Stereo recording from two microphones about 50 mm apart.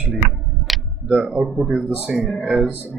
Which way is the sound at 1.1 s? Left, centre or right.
Right.